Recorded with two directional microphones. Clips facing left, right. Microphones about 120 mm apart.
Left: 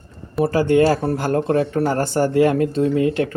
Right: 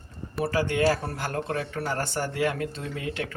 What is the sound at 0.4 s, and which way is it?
Speech, 35° left (ahead or behind).